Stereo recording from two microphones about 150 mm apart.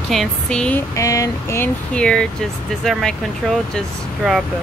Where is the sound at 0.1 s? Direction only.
5° left (ahead or behind).